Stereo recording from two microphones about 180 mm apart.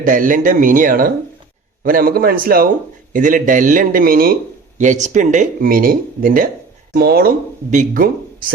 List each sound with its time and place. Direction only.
0.0 s speech: 45° right (ahead or behind)
4.8 s speech: 45° right (ahead or behind)